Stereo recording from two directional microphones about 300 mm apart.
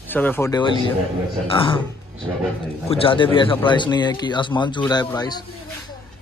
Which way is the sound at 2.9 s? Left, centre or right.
Centre.